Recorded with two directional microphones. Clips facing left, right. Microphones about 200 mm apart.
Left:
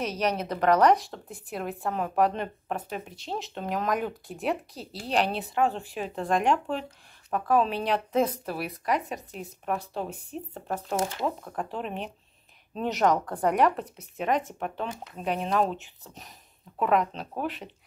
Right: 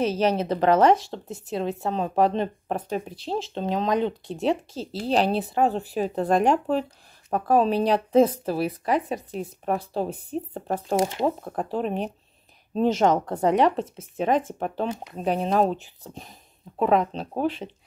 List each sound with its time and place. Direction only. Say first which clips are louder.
0.0 s speech: right 6 dB; 30° right (ahead or behind)
12.7 s speech: right 4 dB; 30° right (ahead or behind)